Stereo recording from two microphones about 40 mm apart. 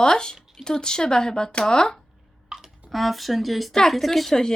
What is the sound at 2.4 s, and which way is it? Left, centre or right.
Clicking, centre.